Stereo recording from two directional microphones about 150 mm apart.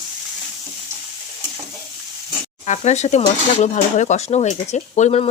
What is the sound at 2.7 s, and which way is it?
Speech, 50° left (ahead or behind).